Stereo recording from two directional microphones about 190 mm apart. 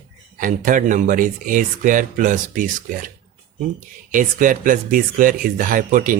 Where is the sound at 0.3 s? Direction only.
45° right (ahead or behind).